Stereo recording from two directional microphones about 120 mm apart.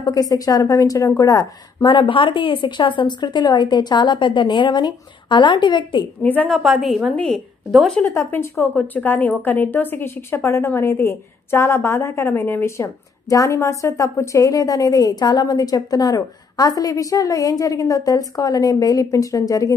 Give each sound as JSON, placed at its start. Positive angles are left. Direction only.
{"t": 0.0, "sound": "a woman's voice", "side_deg": 30}
{"t": 6.2, "sound": "speech", "side_deg": 15}
{"t": 6.5, "sound": "a woman's voice", "side_deg": 0}
{"t": 7.1, "sound": "a woman's voice", "side_deg": 10}
{"t": 8.0, "sound": "a woman's voice", "side_deg": 20}